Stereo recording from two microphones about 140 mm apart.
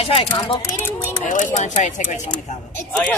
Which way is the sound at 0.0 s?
40° left (ahead or behind).